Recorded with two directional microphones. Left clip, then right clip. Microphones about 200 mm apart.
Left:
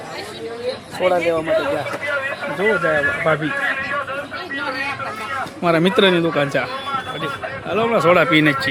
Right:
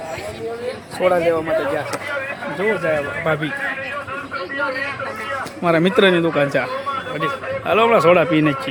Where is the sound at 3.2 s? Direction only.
25° left (ahead or behind).